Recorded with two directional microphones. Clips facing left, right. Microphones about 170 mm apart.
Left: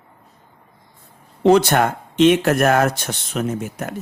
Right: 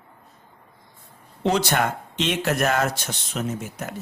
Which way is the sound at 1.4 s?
55° left (ahead or behind).